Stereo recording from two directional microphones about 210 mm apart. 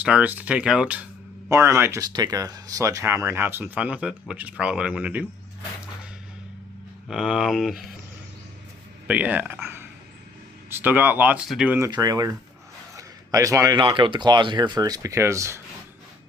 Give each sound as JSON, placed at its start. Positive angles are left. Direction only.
{"t": 0.0, "sound": "speech", "side_deg": -5}
{"t": 7.1, "sound": "speech", "side_deg": 0}
{"t": 9.0, "sound": "speech", "side_deg": -5}
{"t": 11.9, "sound": "speech", "side_deg": -20}